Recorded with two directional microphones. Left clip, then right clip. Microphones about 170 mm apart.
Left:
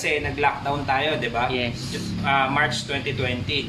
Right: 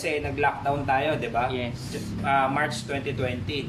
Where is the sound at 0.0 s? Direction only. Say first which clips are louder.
Left 3 dB; 20° right (ahead or behind).